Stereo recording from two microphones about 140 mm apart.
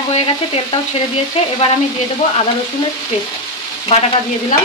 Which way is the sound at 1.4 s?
45° left (ahead or behind).